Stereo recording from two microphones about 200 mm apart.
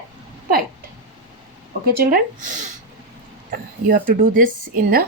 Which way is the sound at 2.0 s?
45° right (ahead or behind).